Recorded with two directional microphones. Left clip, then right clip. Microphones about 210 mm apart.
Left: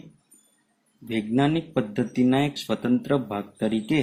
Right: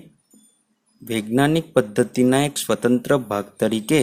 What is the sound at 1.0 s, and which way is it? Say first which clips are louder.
Speech: right 4 dB; 40° right (ahead or behind).